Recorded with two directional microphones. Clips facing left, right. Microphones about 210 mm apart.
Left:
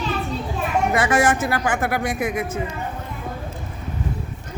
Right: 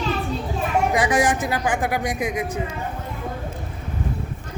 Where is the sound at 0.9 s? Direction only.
15° right (ahead or behind).